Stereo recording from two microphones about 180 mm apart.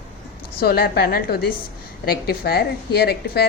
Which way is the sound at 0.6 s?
55° left (ahead or behind).